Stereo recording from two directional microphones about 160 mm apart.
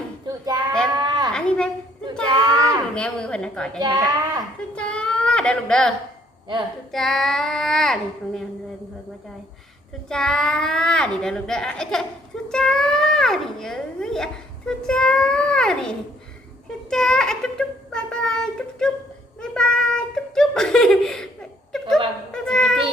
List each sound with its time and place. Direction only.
0.3 s child singing: 25° right (ahead or behind)
1.3 s a sound: 5° left (ahead or behind)
2.3 s a sound: 25° right (ahead or behind)
2.9 s a child's voice: 5° left (ahead or behind)
3.8 s a child's voice: 25° right (ahead or behind)
4.7 s a sound: 5° left (ahead or behind)
6.9 s a child's voice: 5° left (ahead or behind)
10.1 s a child's voice: 5° left (ahead or behind)
22.3 s a child's voice: 5° left (ahead or behind)